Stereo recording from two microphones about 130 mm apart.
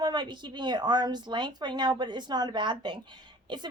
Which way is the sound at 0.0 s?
35° right (ahead or behind).